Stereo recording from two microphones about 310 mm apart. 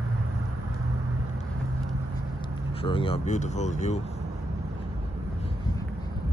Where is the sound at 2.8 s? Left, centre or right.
Centre.